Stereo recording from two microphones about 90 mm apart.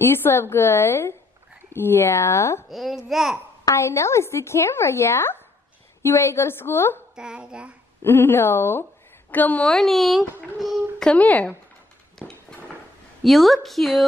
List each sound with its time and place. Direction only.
0.0 s a woman's voice: 25° left (ahead or behind)
2.7 s speech: 5° right (ahead or behind)
3.6 s a woman's voice: 35° left (ahead or behind)
7.2 s a child's voice: 10° right (ahead or behind)
8.0 s a woman's voice: 25° left (ahead or behind); by 11.1 s centre (ahead or behind)
11.1 s speech: 15° left (ahead or behind)
13.2 s speech: centre (ahead or behind)